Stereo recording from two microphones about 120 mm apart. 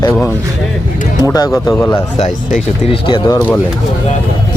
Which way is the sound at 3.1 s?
35° left (ahead or behind).